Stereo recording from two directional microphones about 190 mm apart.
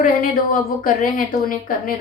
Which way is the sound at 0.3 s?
50° left (ahead or behind).